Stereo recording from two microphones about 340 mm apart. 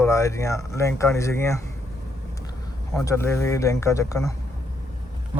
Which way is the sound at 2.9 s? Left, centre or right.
Centre.